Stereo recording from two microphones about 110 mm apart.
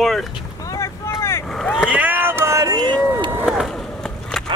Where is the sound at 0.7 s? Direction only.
25° left (ahead or behind).